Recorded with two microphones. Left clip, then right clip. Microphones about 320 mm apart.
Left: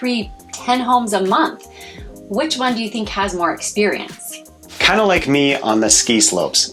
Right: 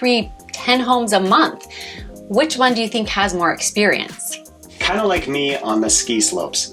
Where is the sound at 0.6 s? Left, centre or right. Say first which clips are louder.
Even; right.